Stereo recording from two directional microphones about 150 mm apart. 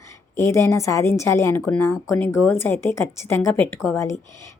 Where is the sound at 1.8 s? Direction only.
20° left (ahead or behind).